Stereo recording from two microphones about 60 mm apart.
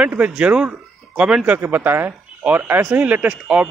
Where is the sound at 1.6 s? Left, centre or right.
Right.